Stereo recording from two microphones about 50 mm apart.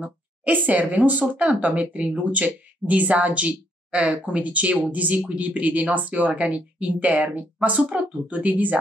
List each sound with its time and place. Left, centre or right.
0.0 s speech: right